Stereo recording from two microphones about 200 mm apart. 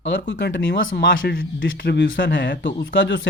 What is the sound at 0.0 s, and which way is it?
Speech, 65° left (ahead or behind).